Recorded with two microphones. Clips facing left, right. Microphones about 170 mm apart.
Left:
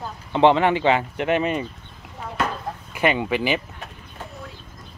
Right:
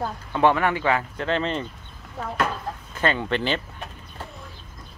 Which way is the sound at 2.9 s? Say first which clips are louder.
Left 3 dB; 15° left (ahead or behind).